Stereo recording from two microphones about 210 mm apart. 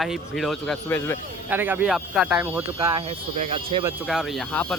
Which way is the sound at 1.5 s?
10° right (ahead or behind).